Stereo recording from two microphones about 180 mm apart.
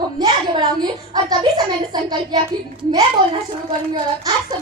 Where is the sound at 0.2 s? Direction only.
25° right (ahead or behind).